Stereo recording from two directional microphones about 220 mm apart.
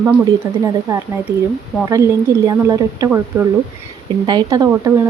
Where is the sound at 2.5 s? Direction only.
15° right (ahead or behind).